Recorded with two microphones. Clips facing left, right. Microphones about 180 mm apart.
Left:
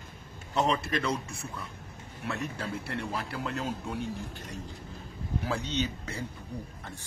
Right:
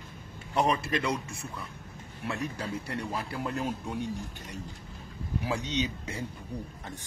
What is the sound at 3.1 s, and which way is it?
Speech, 20° right (ahead or behind).